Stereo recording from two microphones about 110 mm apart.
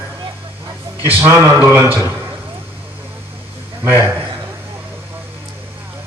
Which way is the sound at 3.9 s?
20° right (ahead or behind).